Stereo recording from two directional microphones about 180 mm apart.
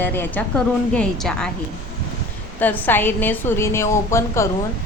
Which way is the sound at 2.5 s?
10° left (ahead or behind).